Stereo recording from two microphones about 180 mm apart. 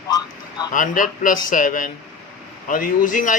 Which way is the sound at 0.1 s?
20° left (ahead or behind).